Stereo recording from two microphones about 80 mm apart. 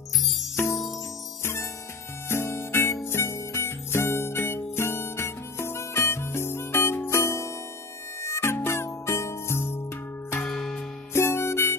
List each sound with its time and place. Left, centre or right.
1.4 s music: left
10.4 s music: centre
11.1 s music: left